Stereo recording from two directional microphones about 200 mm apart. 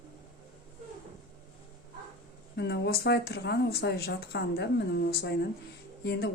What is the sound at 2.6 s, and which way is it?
A woman's voice, 60° left (ahead or behind).